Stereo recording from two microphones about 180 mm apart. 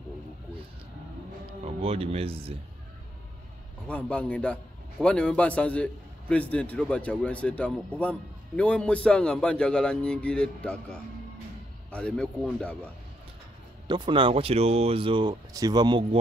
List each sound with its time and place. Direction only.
1.6 s speech: 35° right (ahead or behind)
3.8 s a man's voice: 5° left (ahead or behind)
13.8 s speech: 25° right (ahead or behind)